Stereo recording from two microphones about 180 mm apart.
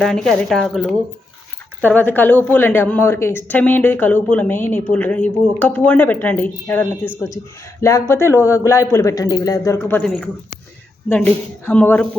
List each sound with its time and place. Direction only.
0.0 s a woman's voice: 5° left (ahead or behind)
11.1 s a woman's voice: 10° left (ahead or behind)